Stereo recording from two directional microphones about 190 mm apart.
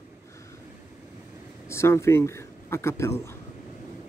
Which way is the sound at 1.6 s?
15° left (ahead or behind).